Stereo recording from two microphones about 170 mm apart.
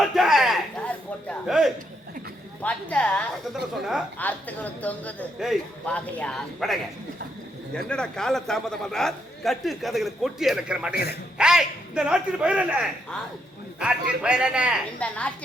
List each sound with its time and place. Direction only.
0.0 s a sound: centre (ahead or behind)
2.6 s speech: 10° left (ahead or behind)
3.5 s a man's voice: 5° right (ahead or behind)
4.2 s a man's voice: 10° left (ahead or behind)
7.9 s a man's voice: 5° left (ahead or behind)
10.9 s a man's voice: 65° left (ahead or behind)
11.3 s a man's voice: 5° right (ahead or behind)
14.9 s speech: 5° left (ahead or behind)